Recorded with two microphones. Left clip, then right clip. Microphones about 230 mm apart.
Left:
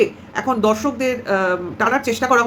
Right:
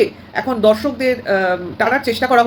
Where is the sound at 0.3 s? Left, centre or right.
Centre.